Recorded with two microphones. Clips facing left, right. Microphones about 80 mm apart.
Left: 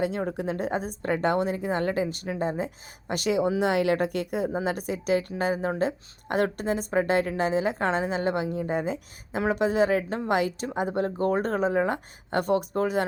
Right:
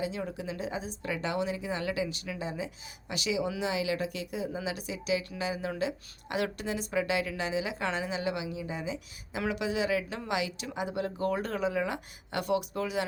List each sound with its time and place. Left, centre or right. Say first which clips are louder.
0.0 s a woman's voice: left 7 dB; left